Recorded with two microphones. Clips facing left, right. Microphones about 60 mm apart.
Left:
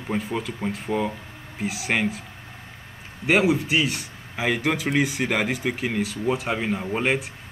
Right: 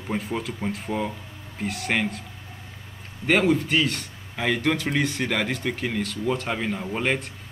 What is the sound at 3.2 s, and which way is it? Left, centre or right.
Speech, centre.